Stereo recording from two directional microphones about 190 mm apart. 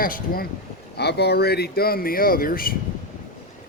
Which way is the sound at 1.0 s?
60° left (ahead or behind).